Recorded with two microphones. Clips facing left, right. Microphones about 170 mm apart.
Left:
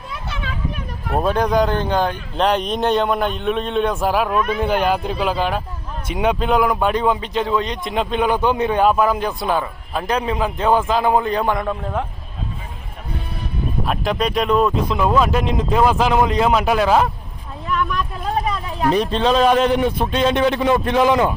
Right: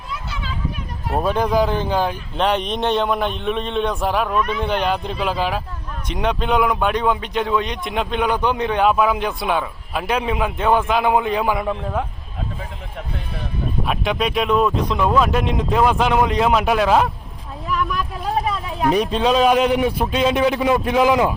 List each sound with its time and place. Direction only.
0.1 s a sound: 60° left (ahead or behind)
1.1 s speech: centre (ahead or behind)
13.8 s speech: centre (ahead or behind)